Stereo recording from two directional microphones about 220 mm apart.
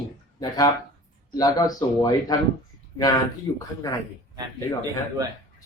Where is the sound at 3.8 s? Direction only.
15° left (ahead or behind).